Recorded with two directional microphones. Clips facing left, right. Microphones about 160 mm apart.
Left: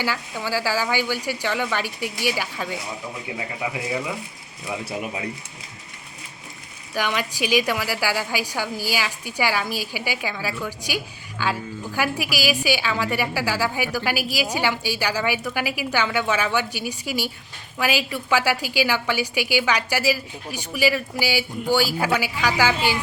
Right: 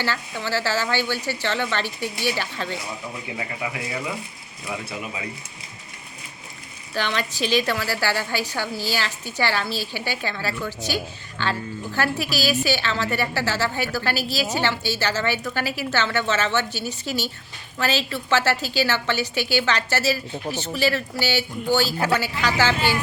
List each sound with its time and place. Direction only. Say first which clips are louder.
0.0 s a woman's voice: even; 10° left (ahead or behind)
4.9 s speech: left 3 dB; 40° left (ahead or behind)
6.9 s a woman's voice: left 1 dB; 10° left (ahead or behind)